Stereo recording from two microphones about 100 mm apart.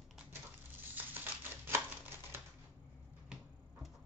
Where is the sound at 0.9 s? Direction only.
20° right (ahead or behind).